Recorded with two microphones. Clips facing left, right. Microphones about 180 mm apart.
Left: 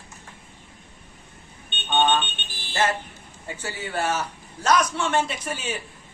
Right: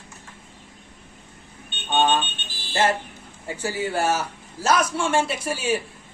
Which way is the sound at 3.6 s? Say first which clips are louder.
Right 4 dB; 10° right (ahead or behind).